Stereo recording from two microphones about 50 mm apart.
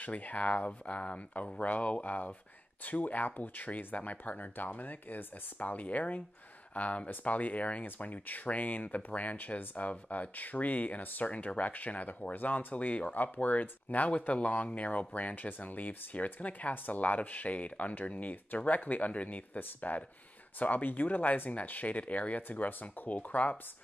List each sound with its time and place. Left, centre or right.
0.0 s speech: left